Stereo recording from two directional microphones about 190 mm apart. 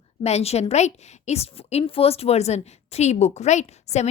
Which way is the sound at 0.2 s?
35° left (ahead or behind).